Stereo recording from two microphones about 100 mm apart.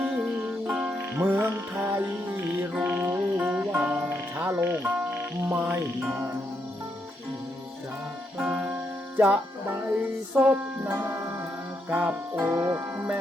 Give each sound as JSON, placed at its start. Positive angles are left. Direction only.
{"t": 0.7, "sound": "music", "side_deg": -10}
{"t": 4.4, "sound": "speech", "side_deg": -20}
{"t": 8.4, "sound": "music", "side_deg": -5}
{"t": 9.2, "sound": "music", "side_deg": -15}